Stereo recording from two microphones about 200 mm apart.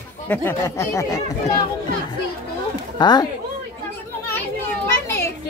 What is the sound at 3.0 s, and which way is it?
Speech, 20° left (ahead or behind).